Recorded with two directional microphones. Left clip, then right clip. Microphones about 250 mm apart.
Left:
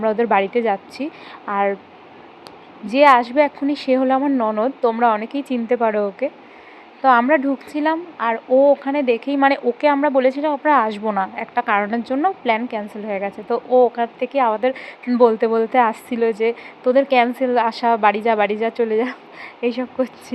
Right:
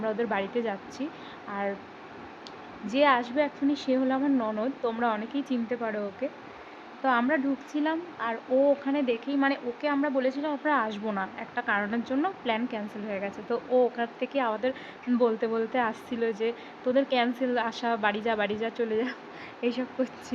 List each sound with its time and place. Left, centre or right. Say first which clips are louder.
0.0 s speech: left 12 dB; centre
2.9 s speech: left 11 dB; centre